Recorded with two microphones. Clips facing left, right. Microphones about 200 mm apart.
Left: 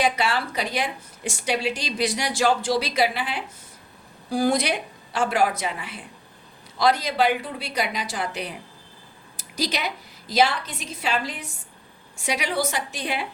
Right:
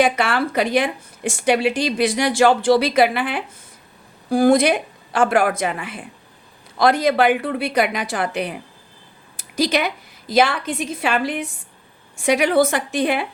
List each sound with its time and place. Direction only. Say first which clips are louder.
0.0 s a woman's voice: right 5 dB; 55° right (ahead or behind)